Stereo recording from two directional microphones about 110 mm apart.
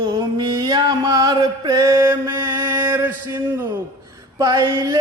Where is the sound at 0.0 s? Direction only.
40° right (ahead or behind).